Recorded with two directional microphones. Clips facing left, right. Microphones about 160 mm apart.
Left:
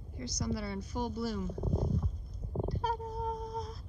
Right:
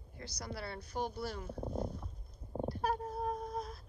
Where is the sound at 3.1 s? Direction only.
55° right (ahead or behind).